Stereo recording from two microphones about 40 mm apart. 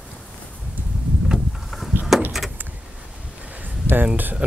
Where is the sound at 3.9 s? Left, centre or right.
Left.